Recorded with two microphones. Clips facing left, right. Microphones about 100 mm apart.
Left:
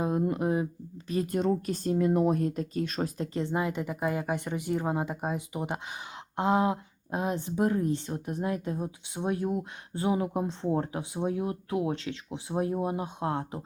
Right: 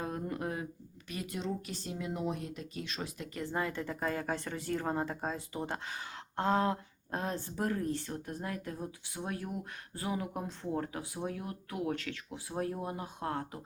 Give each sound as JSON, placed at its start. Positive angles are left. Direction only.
{"t": 0.0, "sound": "speech", "side_deg": 20}
{"t": 3.3, "sound": "speech", "side_deg": 20}